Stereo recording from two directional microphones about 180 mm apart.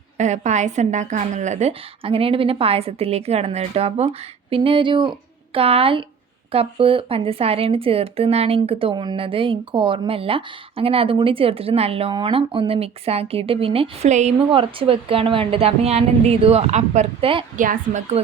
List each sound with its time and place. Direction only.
0.2 s speech: 40° right (ahead or behind)
17.6 s a woman's voice: 45° right (ahead or behind)